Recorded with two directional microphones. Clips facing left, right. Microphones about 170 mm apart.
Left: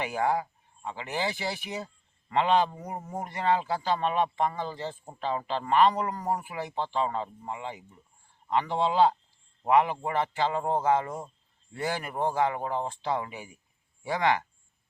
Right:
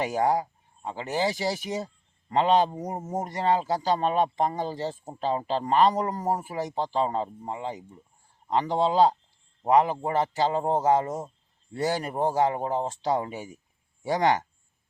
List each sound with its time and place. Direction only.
0.0 s a man's voice: 35° right (ahead or behind)